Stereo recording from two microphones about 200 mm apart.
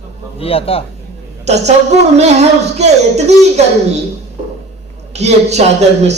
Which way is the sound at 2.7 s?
35° right (ahead or behind).